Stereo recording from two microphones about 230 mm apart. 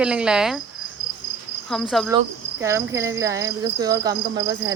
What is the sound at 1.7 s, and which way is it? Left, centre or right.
Speech, centre.